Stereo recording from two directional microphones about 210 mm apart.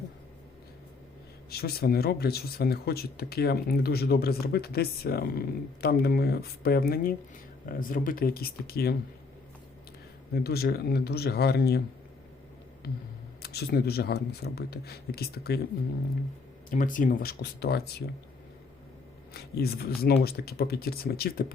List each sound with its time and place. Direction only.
1.5 s speech: 50° left (ahead or behind)
10.3 s speech: 50° left (ahead or behind)
13.4 s speech: 50° left (ahead or behind)
16.6 s speech: 40° left (ahead or behind)
19.3 s speech: 50° left (ahead or behind)